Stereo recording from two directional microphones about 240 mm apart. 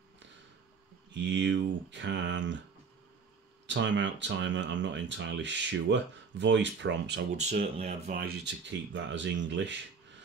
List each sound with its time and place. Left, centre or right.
1.1 s speech: right
3.6 s speech: right
7.3 s speech: right
8.2 s speech: right